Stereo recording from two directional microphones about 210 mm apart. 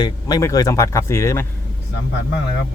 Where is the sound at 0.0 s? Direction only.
20° left (ahead or behind).